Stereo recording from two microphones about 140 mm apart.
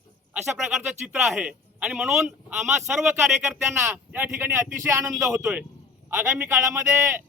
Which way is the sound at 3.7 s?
15° right (ahead or behind).